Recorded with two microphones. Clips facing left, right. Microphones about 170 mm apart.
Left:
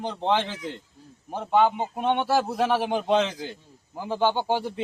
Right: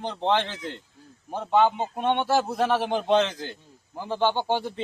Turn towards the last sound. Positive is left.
turn(degrees=10)  # may be behind; listen again after turning